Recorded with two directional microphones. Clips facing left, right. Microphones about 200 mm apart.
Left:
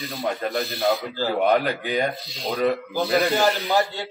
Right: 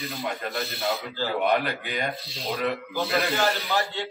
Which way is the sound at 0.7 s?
40° left (ahead or behind).